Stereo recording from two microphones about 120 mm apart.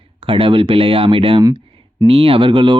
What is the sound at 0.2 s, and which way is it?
Speech, 50° right (ahead or behind).